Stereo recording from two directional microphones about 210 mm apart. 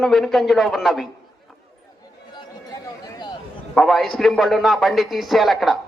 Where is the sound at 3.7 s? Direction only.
Centre (ahead or behind).